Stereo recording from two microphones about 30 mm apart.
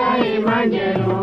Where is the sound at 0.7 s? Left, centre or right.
Centre.